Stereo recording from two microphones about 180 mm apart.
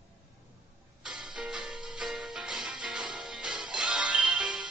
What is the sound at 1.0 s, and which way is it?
Music, 5° right (ahead or behind).